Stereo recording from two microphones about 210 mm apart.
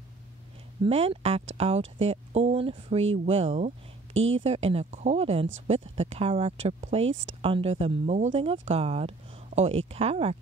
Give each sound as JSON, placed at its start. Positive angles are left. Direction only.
{"t": 0.8, "sound": "speech", "side_deg": -25}